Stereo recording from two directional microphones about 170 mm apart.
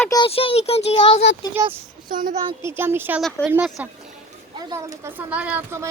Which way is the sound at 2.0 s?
55° right (ahead or behind).